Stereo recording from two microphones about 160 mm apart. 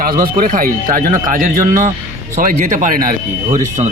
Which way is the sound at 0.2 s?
60° right (ahead or behind).